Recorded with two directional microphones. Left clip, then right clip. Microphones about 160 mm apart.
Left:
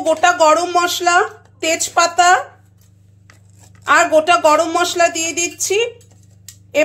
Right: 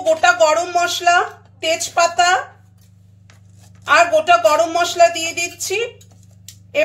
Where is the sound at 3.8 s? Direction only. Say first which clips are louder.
Left 1 dB; 45° left (ahead or behind).